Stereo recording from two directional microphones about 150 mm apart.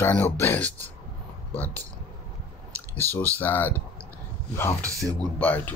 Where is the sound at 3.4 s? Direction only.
10° left (ahead or behind).